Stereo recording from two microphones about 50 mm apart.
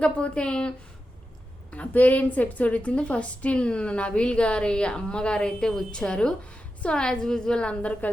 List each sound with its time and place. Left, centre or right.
0.0 s a woman's voice: left
1.7 s a woman's voice: left